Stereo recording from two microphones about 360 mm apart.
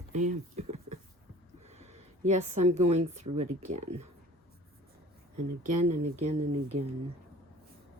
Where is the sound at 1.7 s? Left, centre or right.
Centre.